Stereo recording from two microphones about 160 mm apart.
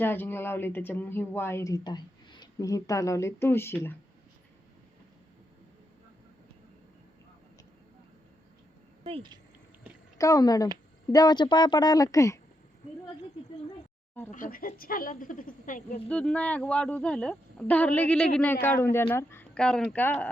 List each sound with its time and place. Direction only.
0.0 s speech: 15° left (ahead or behind)
9.0 s speech: 30° right (ahead or behind)
10.2 s a woman's voice: 20° left (ahead or behind)
14.3 s a woman's voice: 55° left (ahead or behind)
16.0 s speech: 5° left (ahead or behind)